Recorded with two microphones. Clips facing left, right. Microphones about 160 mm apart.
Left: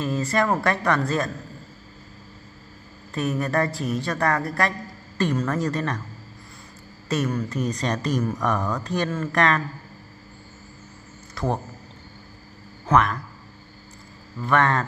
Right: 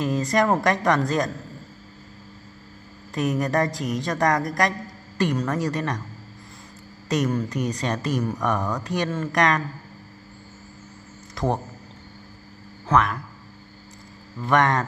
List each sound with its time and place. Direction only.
0.0 s a woman's voice: 20° right (ahead or behind)
3.2 s a woman's voice: 20° right (ahead or behind)
7.1 s a woman's voice: 20° right (ahead or behind)
7.5 s a woman's voice: 10° right (ahead or behind)
11.3 s a man's voice: 20° right (ahead or behind)
12.8 s speech: 5° left (ahead or behind)
14.4 s a woman's voice: 15° right (ahead or behind)